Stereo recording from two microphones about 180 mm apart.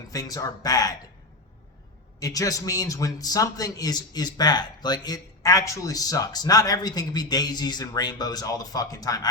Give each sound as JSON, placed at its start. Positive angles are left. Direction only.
{"t": 0.1, "sound": "a man's voice", "side_deg": 20}
{"t": 2.1, "sound": "a man's voice", "side_deg": 20}